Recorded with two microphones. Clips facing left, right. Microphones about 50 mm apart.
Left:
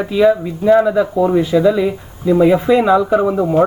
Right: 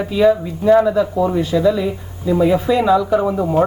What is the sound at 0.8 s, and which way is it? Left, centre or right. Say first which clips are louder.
Speech: left 2 dB; left.